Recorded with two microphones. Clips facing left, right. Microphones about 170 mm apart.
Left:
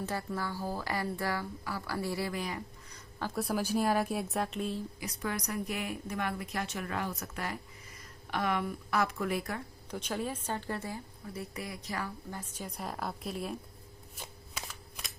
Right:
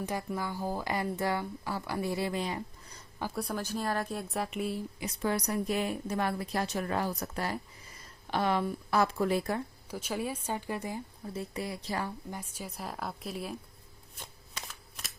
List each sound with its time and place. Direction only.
0.0 s speech: 15° right (ahead or behind)
3.3 s speech: 5° left (ahead or behind)
4.9 s speech: 25° right (ahead or behind)
9.9 s a woman's voice: 10° right (ahead or behind); by 12.1 s 30° right (ahead or behind)
12.3 s speech: 10° right (ahead or behind)
14.2 s shuffling cards: 5° left (ahead or behind)